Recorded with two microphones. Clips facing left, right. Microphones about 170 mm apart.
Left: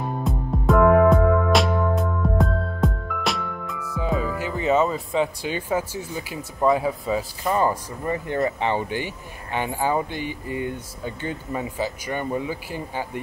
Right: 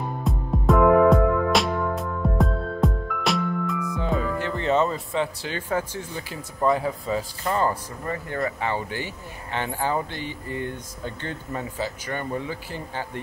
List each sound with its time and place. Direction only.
0.2 s music: centre (ahead or behind)
6.8 s speech: 10° left (ahead or behind)